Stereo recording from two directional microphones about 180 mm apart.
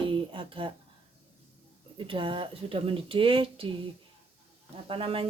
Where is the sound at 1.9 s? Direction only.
30° right (ahead or behind).